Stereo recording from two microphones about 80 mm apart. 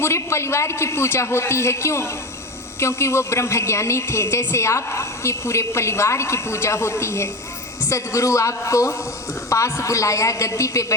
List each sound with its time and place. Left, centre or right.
0.0 s a woman's voice: left